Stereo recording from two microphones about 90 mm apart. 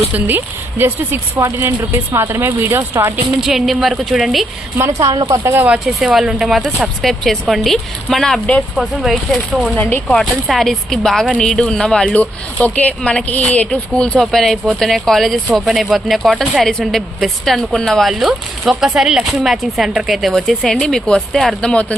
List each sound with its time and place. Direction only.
0.1 s speech: 20° right (ahead or behind)
3.4 s a woman's voice: 5° right (ahead or behind)
4.8 s speech: 40° right (ahead or behind)
5.8 s a woman's voice: 5° right (ahead or behind); by 21.9 s 15° left (ahead or behind)